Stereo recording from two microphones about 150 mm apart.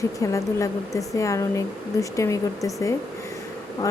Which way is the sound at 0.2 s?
20° left (ahead or behind).